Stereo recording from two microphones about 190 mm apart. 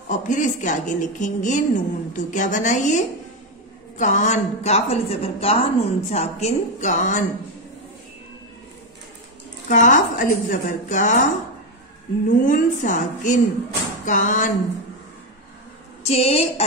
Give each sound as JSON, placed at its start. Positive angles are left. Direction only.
{"t": 0.1, "sound": "a woman's voice", "side_deg": 40}
{"t": 4.0, "sound": "a woman's voice", "side_deg": 40}
{"t": 9.7, "sound": "a woman's voice", "side_deg": 40}
{"t": 12.3, "sound": "a woman's voice", "side_deg": 45}
{"t": 16.0, "sound": "a woman's voice", "side_deg": 35}